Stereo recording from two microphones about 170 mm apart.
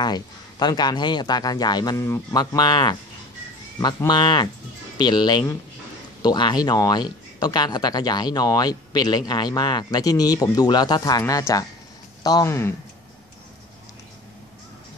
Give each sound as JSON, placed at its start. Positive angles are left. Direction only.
{"t": 0.0, "sound": "speech", "side_deg": 25}